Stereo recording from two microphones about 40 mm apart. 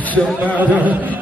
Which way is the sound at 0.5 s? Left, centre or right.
Right.